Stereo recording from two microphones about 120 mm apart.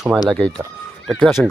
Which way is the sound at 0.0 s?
Centre (ahead or behind).